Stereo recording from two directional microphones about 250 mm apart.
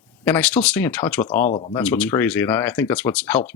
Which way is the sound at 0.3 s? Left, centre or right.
Centre.